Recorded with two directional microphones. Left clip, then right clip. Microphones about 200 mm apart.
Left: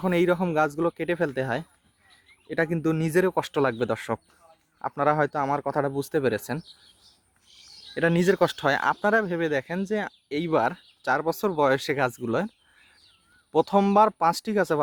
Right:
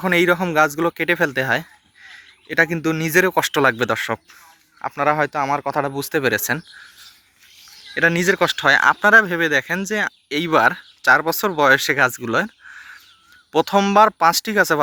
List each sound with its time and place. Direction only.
0.0 s speech: 5° left (ahead or behind)
7.9 s speech: 15° left (ahead or behind)
13.5 s speech: 5° left (ahead or behind)